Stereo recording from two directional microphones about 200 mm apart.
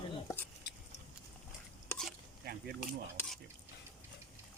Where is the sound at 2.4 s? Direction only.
50° right (ahead or behind).